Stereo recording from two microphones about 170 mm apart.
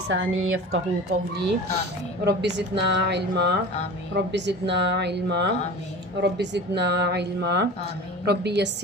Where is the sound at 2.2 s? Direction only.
90° right.